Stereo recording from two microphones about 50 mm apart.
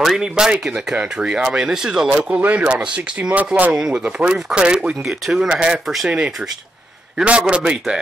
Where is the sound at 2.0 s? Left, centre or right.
Right.